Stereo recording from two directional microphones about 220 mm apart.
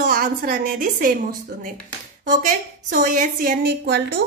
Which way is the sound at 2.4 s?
35° right (ahead or behind).